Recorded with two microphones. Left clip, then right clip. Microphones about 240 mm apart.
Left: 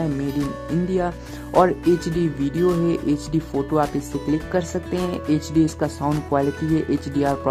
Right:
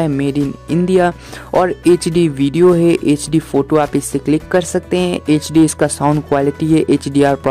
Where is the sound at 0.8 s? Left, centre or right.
Right.